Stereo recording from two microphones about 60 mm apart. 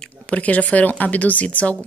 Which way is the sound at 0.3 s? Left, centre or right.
Left.